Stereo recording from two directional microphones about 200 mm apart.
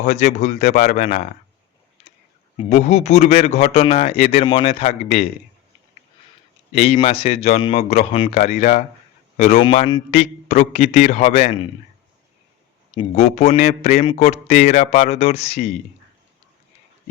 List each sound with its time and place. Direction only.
0.0 s speech: 40° left (ahead or behind)
2.6 s speech: 35° left (ahead or behind)
6.7 s speech: 35° left (ahead or behind)
12.9 s speech: 30° left (ahead or behind)
14.0 s speech: 30° left (ahead or behind)